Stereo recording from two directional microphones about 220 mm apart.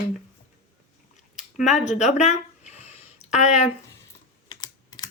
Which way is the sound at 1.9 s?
30° left (ahead or behind).